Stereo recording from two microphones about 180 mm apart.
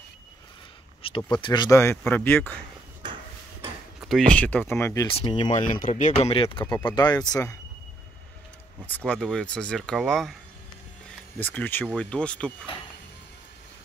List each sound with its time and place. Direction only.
1.0 s speech: 30° left (ahead or behind); by 2.5 s 10° left (ahead or behind)
3.0 s a sound: 25° right (ahead or behind)
4.0 s speech: centre (ahead or behind)
5.1 s speech: 30° left (ahead or behind)
5.5 s speech: 45° left (ahead or behind); by 7.5 s 20° left (ahead or behind)
8.8 s speech: 10° left (ahead or behind)